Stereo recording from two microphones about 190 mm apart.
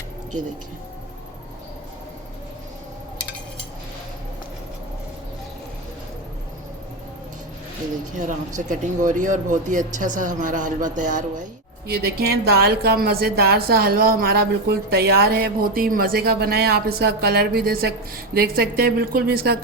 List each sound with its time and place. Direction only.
8.1 s speech: 40° right (ahead or behind)
11.9 s a woman's voice: 55° right (ahead or behind)